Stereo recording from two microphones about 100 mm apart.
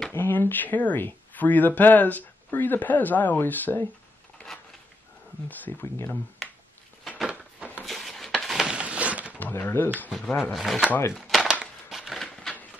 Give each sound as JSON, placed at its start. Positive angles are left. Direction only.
{"t": 0.1, "sound": "speech", "side_deg": 20}
{"t": 5.5, "sound": "speech", "side_deg": 20}
{"t": 7.1, "sound": "a sound", "side_deg": -5}
{"t": 9.4, "sound": "speech", "side_deg": 20}
{"t": 10.1, "sound": "speech", "side_deg": 0}
{"t": 10.9, "sound": "speech", "side_deg": 25}
{"t": 11.1, "sound": "a sound", "side_deg": 0}